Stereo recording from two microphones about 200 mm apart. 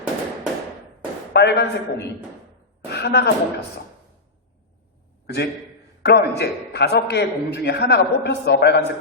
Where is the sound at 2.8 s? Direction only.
55° left (ahead or behind).